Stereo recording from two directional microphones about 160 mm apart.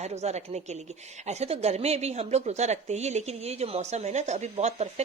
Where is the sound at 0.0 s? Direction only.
45° right (ahead or behind).